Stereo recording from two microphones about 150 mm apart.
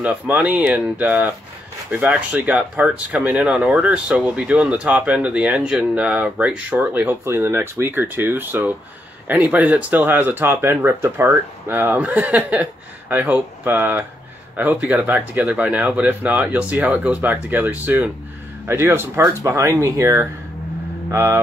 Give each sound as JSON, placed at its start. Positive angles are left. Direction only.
{"t": 0.0, "sound": "speech", "side_deg": -10}